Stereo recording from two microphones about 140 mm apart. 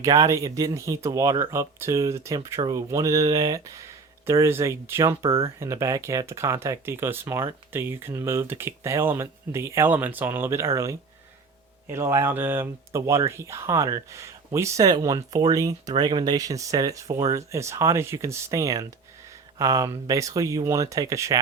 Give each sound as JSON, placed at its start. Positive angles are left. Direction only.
{"t": 0.0, "sound": "speech", "side_deg": -25}